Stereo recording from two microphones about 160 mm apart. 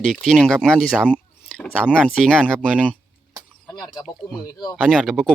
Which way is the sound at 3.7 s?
25° left (ahead or behind).